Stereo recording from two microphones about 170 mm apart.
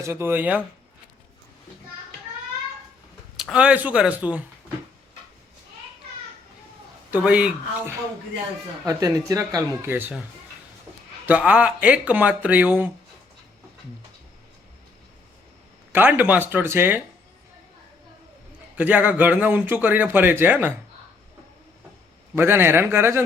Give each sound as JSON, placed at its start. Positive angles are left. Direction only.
{"t": 0.0, "sound": "a man's voice", "side_deg": -15}
{"t": 3.3, "sound": "a man's voice", "side_deg": -5}
{"t": 7.1, "sound": "a man's voice", "side_deg": -5}
{"t": 8.9, "sound": "speech", "side_deg": -20}
{"t": 11.3, "sound": "a man's voice", "side_deg": -10}
{"t": 15.9, "sound": "a man's voice", "side_deg": -10}
{"t": 18.8, "sound": "a man's voice", "side_deg": -10}
{"t": 22.4, "sound": "a man's voice", "side_deg": -15}